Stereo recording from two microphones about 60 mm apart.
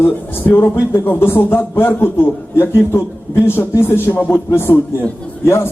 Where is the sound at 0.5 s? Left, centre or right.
Left.